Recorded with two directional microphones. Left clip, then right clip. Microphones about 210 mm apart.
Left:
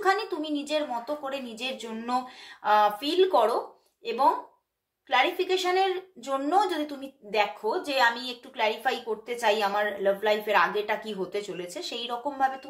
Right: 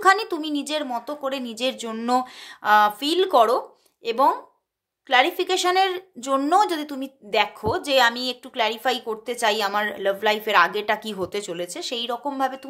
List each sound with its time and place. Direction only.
0.0 s a woman's voice: 55° right (ahead or behind)